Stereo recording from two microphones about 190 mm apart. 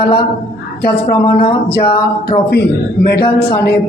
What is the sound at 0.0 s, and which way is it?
A woman's voice, 55° left (ahead or behind).